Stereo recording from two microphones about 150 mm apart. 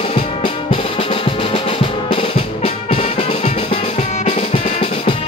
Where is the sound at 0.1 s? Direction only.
35° left (ahead or behind).